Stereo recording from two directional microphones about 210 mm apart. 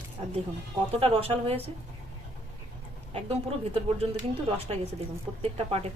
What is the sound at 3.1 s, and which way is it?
A woman's voice, 30° right (ahead or behind).